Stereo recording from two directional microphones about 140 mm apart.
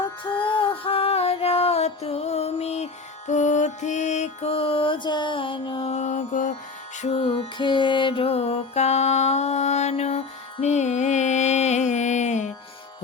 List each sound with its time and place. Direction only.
0.3 s music: 40° left (ahead or behind); by 6.5 s 65° left (ahead or behind)
7.0 s mantra: 40° left (ahead or behind); by 12.5 s 55° left (ahead or behind)